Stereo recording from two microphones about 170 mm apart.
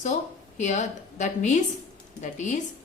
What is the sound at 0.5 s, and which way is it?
A woman's voice, 45° left (ahead or behind).